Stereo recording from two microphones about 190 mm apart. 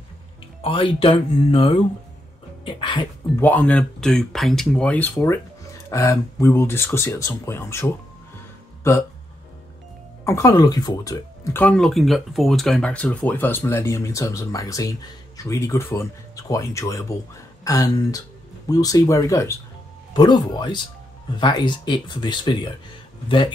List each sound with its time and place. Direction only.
0.6 s speech: 30° left (ahead or behind)
3.3 s speech: 10° left (ahead or behind)
10.2 s speech: 15° left (ahead or behind)